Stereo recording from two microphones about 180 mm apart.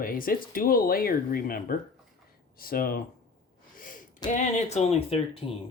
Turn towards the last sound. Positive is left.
turn(degrees=30)  # may be behind; listen again after turning